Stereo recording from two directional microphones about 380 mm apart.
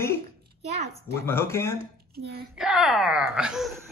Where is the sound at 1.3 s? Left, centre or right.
Centre.